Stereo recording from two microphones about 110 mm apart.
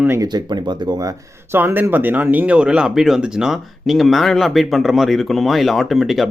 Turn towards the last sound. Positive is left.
turn(degrees=0)  # may be behind; listen again after turning